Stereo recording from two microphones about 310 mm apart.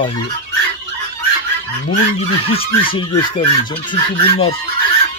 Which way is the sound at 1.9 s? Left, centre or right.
Centre.